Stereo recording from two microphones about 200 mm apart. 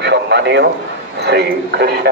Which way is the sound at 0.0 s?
60° right (ahead or behind).